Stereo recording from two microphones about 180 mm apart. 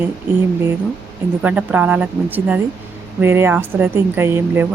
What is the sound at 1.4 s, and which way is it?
Speech, 5° right (ahead or behind).